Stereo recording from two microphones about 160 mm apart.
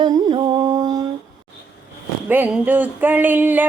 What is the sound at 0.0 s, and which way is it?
Music, 30° right (ahead or behind).